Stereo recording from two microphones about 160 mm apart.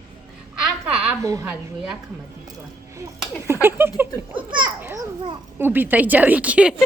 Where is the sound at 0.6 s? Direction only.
5° right (ahead or behind).